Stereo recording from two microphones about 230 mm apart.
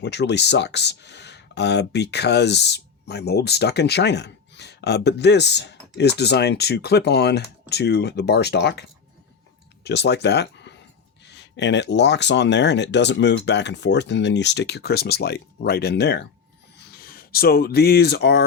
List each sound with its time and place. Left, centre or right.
0.0 s speech: left
9.8 s speech: left